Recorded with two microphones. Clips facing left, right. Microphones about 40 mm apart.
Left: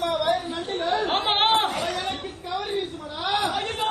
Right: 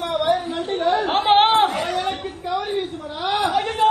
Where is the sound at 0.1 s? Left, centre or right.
Centre.